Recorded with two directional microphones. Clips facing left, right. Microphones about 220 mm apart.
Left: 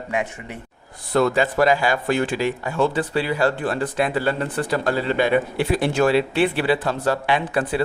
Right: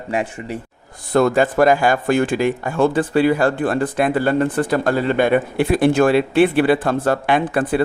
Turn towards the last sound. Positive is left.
turn(degrees=-50)  # may be behind; listen again after turning